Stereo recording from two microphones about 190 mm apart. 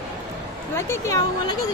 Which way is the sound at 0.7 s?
15° left (ahead or behind).